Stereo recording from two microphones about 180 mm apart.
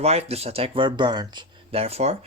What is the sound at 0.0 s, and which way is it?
Speech, 35° right (ahead or behind).